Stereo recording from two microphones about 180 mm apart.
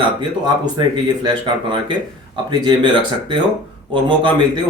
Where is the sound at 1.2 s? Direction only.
25° right (ahead or behind).